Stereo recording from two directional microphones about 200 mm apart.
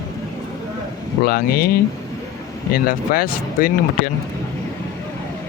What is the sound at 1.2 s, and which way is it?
Speech, 50° left (ahead or behind).